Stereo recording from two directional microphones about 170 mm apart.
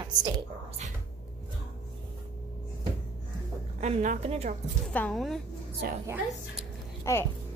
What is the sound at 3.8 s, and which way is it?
Speech, 45° right (ahead or behind).